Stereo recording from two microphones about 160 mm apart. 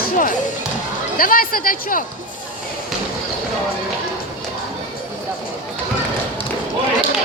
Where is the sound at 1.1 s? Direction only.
60° left (ahead or behind).